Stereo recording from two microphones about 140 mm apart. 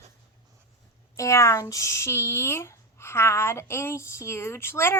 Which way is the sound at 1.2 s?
20° left (ahead or behind).